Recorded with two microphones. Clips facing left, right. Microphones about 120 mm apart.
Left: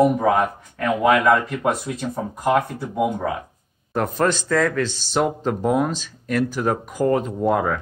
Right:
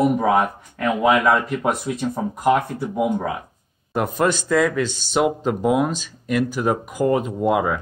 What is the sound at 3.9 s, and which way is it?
Speech, 10° right (ahead or behind).